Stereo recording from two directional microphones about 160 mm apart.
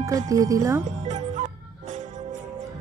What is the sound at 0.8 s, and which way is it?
Music, 50° right (ahead or behind).